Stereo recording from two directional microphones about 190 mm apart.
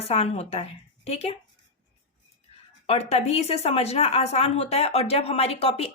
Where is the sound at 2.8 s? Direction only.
30° left (ahead or behind).